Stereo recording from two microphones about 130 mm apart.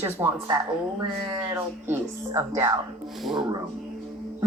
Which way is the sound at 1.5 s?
15° right (ahead or behind).